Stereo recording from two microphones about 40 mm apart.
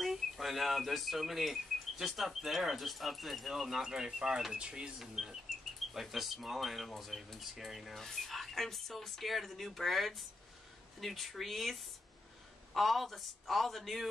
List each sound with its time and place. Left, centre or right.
0.0 s speech: centre; by 4.9 s right
4.9 s speech: centre